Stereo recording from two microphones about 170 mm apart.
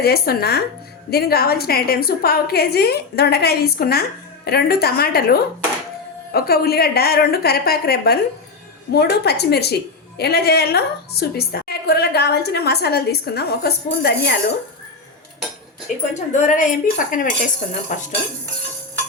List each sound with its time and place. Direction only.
0.0 s a woman's voice: 65° left (ahead or behind)
16.1 s speech: 45° left (ahead or behind)